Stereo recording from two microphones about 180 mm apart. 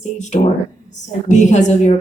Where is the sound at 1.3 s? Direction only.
40° left (ahead or behind).